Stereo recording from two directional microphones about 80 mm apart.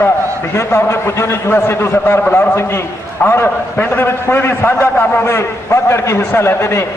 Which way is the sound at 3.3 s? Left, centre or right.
Left.